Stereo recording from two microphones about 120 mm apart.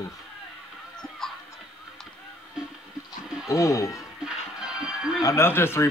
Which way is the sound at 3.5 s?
25° left (ahead or behind).